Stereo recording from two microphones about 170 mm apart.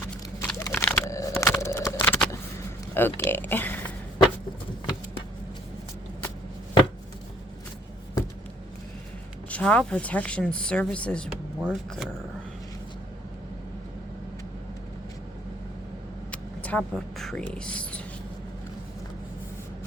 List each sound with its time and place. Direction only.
0.0 s a sound: 10° left (ahead or behind)
2.9 s speech: 10° left (ahead or behind)
9.5 s a woman's voice: 5° left (ahead or behind)
16.3 s speech: 10° left (ahead or behind)